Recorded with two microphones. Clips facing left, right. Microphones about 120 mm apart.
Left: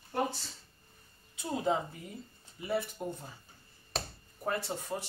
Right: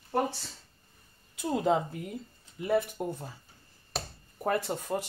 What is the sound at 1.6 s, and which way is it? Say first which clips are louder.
Speech: right 4 dB; 65° right (ahead or behind).